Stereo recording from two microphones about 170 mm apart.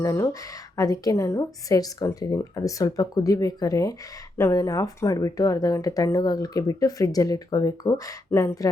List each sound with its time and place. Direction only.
0.0 s speech: 20° left (ahead or behind)